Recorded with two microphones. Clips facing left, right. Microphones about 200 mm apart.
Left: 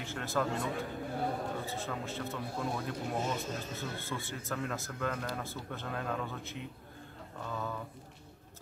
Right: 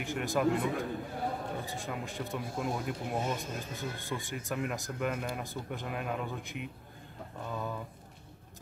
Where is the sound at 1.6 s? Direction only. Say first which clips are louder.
Even; 15° right (ahead or behind).